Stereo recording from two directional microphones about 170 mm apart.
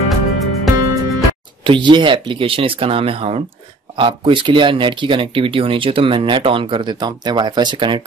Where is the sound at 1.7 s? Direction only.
30° right (ahead or behind).